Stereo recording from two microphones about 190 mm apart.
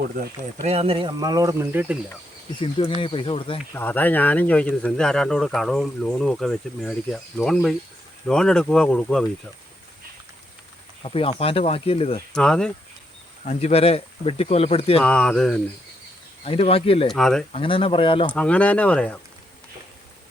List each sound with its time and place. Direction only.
0.6 s speech: 35° right (ahead or behind); by 2.0 s 10° right (ahead or behind)
2.6 s speech: 30° left (ahead or behind)
3.8 s speech: 10° left (ahead or behind)
11.0 s speech: 30° left (ahead or behind)
12.3 s speech: 5° left (ahead or behind)
13.4 s speech: 35° left (ahead or behind)
15.0 s speech: 5° left (ahead or behind)
16.4 s speech: 30° left (ahead or behind)
17.1 s speech: centre (ahead or behind)
17.5 s speech: 30° left (ahead or behind)
18.3 s speech: 5° left (ahead or behind)